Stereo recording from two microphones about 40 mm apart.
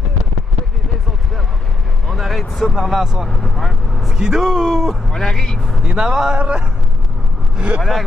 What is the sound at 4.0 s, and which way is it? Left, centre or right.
Speech, centre.